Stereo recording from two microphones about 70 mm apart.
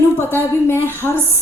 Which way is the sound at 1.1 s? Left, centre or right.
Right.